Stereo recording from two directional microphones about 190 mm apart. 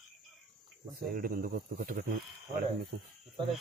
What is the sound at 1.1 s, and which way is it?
Speech, 50° right (ahead or behind).